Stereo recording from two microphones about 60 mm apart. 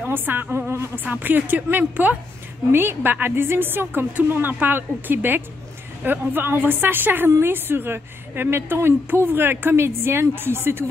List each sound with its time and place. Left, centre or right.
0.0 s a woman's voice: right
1.0 s a woman's voice: right
2.7 s a woman's voice: right
7.2 s a woman's voice: right
7.5 s a woman's voice: right